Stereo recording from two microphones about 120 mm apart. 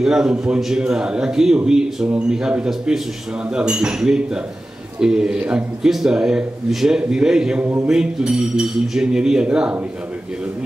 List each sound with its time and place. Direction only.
0.0 s speech: 5° right (ahead or behind)